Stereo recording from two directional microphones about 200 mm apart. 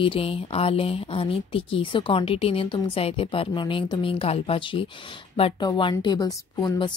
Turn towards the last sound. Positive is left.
turn(degrees=20)  # may be behind; listen again after turning